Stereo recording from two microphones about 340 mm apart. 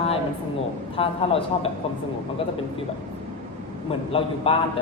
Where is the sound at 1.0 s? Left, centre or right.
Centre.